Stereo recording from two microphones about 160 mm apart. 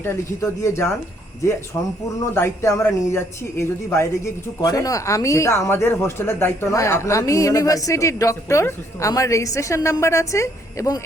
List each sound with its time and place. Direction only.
0.0 s speech: 15° left (ahead or behind)
4.6 s speech: 25° left (ahead or behind)